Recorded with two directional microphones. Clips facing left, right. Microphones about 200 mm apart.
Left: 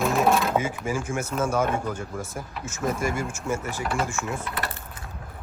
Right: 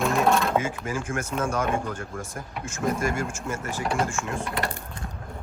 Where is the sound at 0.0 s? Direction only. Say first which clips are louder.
Even; centre (ahead or behind).